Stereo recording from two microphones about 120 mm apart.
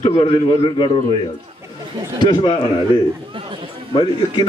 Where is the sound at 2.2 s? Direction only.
45° left (ahead or behind).